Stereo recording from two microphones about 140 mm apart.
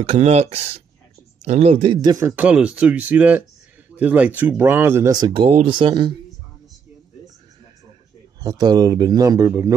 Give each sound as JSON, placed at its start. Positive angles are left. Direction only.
{"t": 0.1, "sound": "speech", "side_deg": -50}
{"t": 2.2, "sound": "speech", "side_deg": -10}
{"t": 5.2, "sound": "speech", "side_deg": -35}
{"t": 8.4, "sound": "a man's voice", "side_deg": -25}